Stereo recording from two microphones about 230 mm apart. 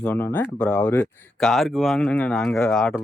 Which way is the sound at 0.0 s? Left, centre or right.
Centre.